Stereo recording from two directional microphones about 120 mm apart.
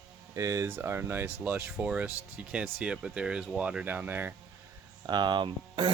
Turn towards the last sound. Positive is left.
turn(degrees=-40)  # may be behind; listen again after turning